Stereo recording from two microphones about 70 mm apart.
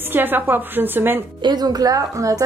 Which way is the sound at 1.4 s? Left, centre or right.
Right.